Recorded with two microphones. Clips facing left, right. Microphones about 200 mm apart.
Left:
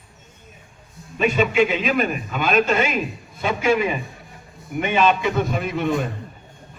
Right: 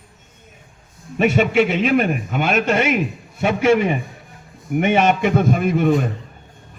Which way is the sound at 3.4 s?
60° right (ahead or behind).